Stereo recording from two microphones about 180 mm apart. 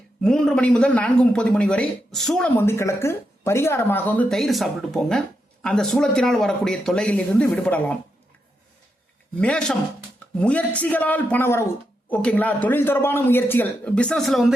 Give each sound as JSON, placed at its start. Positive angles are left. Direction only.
{"t": 0.2, "sound": "a man's voice", "side_deg": 5}
{"t": 2.6, "sound": "a man's voice", "side_deg": 15}
{"t": 9.4, "sound": "a man's voice", "side_deg": 5}